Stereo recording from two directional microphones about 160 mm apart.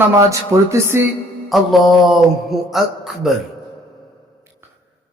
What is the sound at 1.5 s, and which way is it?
A man's voice, centre (ahead or behind).